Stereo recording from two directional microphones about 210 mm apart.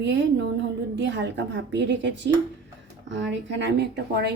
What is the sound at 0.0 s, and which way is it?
Speech, 55° right (ahead or behind).